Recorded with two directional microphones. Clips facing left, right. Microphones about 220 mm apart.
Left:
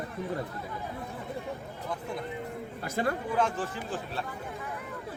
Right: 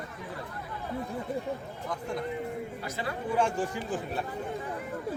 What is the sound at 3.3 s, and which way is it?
Speech, 10° right (ahead or behind).